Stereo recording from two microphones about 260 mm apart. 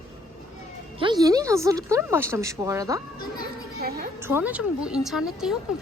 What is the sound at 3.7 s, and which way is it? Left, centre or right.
Speech, right.